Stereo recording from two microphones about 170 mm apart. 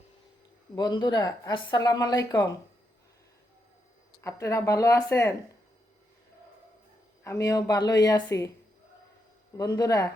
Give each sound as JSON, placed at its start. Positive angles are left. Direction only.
{"t": 0.8, "sound": "speech", "side_deg": 25}
{"t": 4.2, "sound": "speech", "side_deg": 15}
{"t": 7.3, "sound": "speech", "side_deg": 20}
{"t": 9.6, "sound": "speech", "side_deg": 20}